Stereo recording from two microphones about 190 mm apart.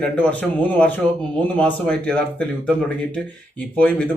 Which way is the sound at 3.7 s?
5° left (ahead or behind).